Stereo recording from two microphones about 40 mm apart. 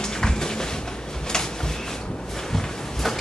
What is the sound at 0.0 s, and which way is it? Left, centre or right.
Music, centre.